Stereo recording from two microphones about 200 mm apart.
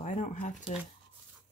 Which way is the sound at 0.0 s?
40° left (ahead or behind).